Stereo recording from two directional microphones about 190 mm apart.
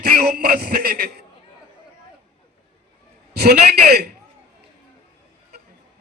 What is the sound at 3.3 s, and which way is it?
Speech, 55° right (ahead or behind).